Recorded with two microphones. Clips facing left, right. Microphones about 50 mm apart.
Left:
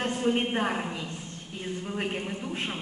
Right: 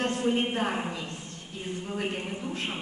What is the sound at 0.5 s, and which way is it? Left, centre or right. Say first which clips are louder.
Speech: left 1 dB; centre.